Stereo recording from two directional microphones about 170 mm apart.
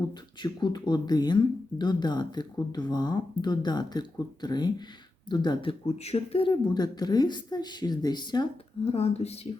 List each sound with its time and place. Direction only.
0.4 s speech: 25° left (ahead or behind)
8.8 s speech: 35° left (ahead or behind)